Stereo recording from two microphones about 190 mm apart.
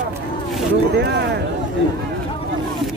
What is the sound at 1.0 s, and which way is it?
Speech, 65° right (ahead or behind).